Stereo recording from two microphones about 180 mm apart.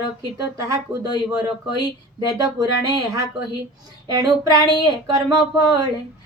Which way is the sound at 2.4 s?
20° right (ahead or behind).